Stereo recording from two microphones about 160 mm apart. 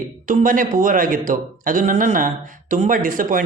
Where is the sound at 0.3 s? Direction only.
55° right (ahead or behind).